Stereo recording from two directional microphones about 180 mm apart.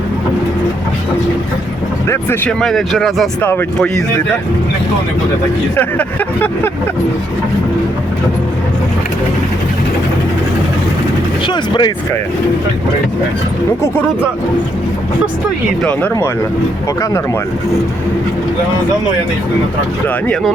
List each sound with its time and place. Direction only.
2.0 s speech: 10° left (ahead or behind)
3.4 s vehicle: 10° left (ahead or behind)
5.7 s vehicle: 10° left (ahead or behind)
11.4 s speech: 25° left (ahead or behind)
15.8 s vehicle: 10° left (ahead or behind)
20.2 s speech: 5° left (ahead or behind)